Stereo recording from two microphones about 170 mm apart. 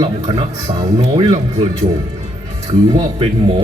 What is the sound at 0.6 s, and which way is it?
Speech, 25° right (ahead or behind).